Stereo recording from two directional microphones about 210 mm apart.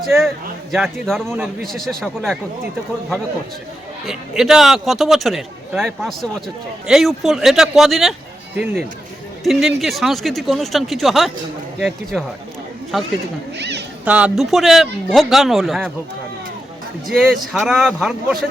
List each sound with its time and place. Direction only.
0.7 s a man's voice: centre (ahead or behind)
4.0 s a man's voice: centre (ahead or behind)
13.6 s speech: 55° right (ahead or behind)
14.0 s a man's voice: 5° right (ahead or behind)
17.1 s a man's voice: centre (ahead or behind)